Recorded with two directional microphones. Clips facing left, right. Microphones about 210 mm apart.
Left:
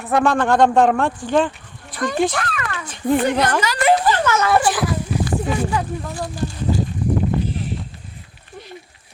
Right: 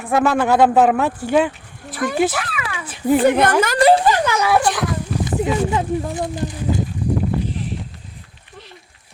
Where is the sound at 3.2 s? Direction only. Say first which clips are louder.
Right 4 dB; 55° right (ahead or behind).